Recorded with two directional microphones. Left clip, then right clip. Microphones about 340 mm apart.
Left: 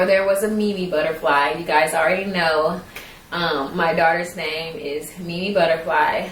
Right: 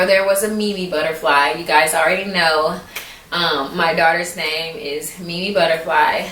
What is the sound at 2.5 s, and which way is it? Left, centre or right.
Speech, centre.